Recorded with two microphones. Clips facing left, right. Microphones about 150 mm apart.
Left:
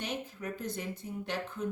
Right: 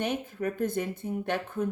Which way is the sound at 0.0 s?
55° right (ahead or behind).